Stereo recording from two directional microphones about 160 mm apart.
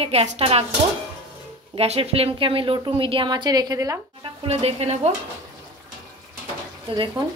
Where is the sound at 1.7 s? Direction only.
40° right (ahead or behind); by 4.0 s 20° right (ahead or behind).